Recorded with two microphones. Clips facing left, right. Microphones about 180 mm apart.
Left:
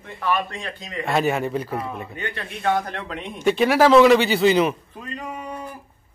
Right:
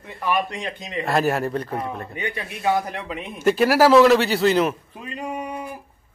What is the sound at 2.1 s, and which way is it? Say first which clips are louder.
A man's voice: right 2 dB; 15° right (ahead or behind).